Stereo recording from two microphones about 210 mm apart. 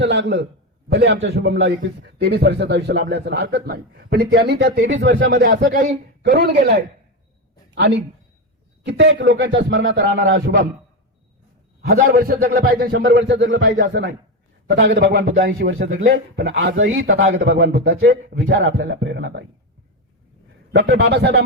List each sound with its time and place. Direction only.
0.0 s a man's voice: 55° right (ahead or behind)
8.9 s speech: 60° right (ahead or behind)
11.8 s a man's voice: 45° right (ahead or behind)
13.0 s a man's voice: 55° right (ahead or behind)
20.7 s speech: 55° right (ahead or behind)